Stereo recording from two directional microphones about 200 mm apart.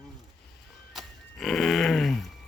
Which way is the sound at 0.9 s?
Centre (ahead or behind).